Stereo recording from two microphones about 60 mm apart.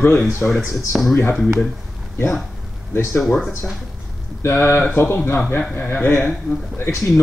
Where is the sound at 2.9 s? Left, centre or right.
Left.